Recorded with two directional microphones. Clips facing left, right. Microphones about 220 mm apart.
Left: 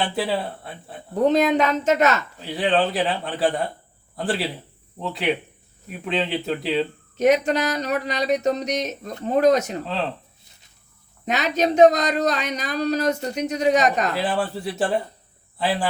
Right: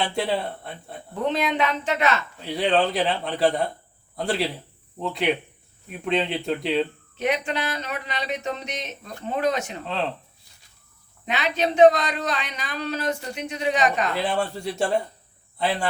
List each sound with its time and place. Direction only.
0.0 s a man's voice: centre (ahead or behind)
1.1 s speech: 40° left (ahead or behind)
2.4 s a man's voice: centre (ahead or behind)
7.2 s speech: 40° left (ahead or behind)
9.8 s a man's voice: centre (ahead or behind)
11.3 s speech: 40° left (ahead or behind)
14.1 s a man's voice: 5° left (ahead or behind)